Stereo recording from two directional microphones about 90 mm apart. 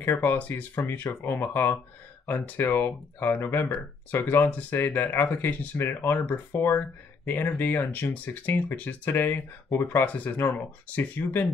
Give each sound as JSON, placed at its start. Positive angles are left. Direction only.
{"t": 0.0, "sound": "speech", "side_deg": 25}